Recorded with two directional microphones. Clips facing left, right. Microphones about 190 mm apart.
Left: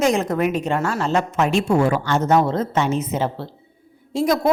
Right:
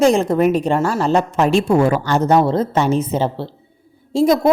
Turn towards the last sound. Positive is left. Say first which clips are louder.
# right 5 dB
turn(degrees=-30)  # may be behind; listen again after turning